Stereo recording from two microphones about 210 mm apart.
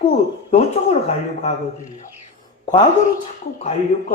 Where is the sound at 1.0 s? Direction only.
30° left (ahead or behind).